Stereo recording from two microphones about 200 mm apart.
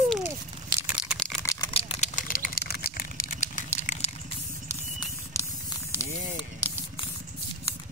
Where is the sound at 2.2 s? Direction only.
45° left (ahead or behind).